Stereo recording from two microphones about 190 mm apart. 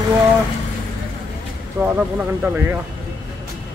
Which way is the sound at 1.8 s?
10° right (ahead or behind).